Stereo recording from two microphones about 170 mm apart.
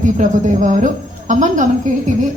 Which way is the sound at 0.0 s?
45° right (ahead or behind).